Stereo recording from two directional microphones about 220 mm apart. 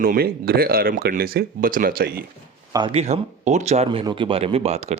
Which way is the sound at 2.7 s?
25° right (ahead or behind).